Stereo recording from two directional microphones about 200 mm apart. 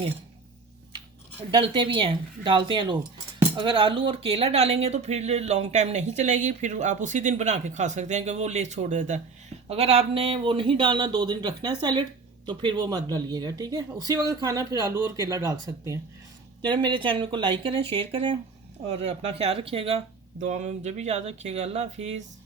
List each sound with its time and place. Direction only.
1.4 s speech: 25° right (ahead or behind)